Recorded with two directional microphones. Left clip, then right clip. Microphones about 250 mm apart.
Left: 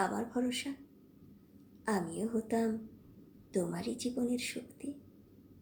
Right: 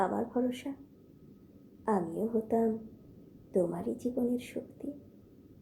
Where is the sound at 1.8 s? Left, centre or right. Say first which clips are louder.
Right 4 dB; centre.